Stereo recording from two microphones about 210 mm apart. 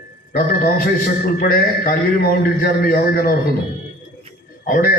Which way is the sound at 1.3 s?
45° left (ahead or behind).